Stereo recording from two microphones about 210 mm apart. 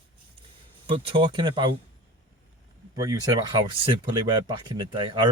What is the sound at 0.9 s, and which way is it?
Speech, 25° right (ahead or behind).